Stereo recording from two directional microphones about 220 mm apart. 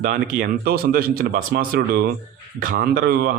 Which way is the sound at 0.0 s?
40° right (ahead or behind).